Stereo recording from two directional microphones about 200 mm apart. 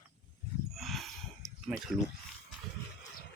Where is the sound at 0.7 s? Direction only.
Centre (ahead or behind).